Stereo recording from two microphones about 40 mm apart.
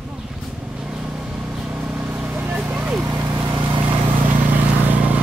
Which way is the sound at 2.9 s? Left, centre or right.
Right.